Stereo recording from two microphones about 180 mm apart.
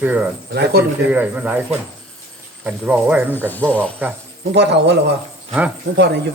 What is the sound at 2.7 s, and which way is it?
Speech, 10° right (ahead or behind).